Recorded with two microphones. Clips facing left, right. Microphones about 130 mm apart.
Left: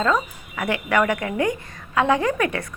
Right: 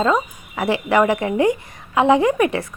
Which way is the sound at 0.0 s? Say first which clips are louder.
Right 3 dB; 25° right (ahead or behind).